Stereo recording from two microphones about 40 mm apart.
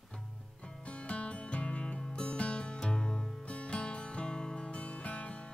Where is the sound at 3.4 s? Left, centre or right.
Left.